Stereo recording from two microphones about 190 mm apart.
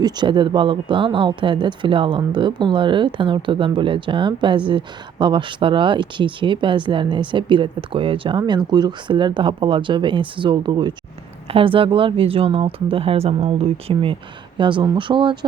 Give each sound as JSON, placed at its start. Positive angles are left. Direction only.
{"t": 0.0, "sound": "speech", "side_deg": -25}